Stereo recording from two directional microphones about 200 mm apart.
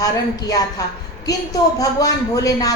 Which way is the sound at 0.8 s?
20° left (ahead or behind).